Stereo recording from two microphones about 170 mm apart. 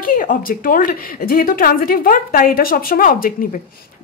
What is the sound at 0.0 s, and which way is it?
A woman's voice, 55° left (ahead or behind).